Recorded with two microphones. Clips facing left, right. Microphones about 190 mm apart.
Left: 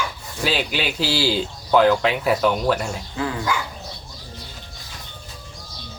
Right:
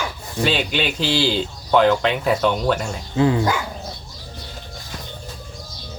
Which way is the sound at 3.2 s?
25° right (ahead or behind).